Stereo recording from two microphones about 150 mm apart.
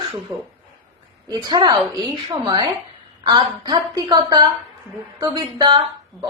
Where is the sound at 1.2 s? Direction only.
30° right (ahead or behind).